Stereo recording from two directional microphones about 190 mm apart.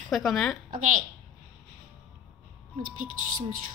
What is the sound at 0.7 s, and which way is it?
Speech, 45° right (ahead or behind).